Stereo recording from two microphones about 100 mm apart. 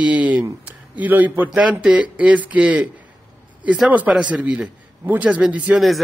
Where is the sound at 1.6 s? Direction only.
10° right (ahead or behind).